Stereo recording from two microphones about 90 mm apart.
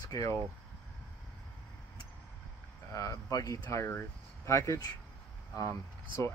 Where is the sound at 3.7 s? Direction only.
30° left (ahead or behind).